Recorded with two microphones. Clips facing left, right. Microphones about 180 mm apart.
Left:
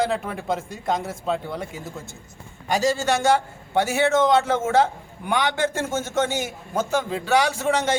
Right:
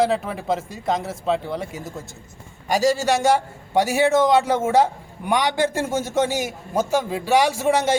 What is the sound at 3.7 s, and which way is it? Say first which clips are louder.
A man's voice: right 2 dB; 10° right (ahead or behind).